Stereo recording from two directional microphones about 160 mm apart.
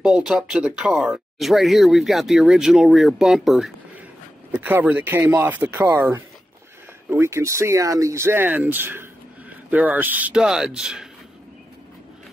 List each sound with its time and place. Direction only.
0.0 s speech: 5° right (ahead or behind)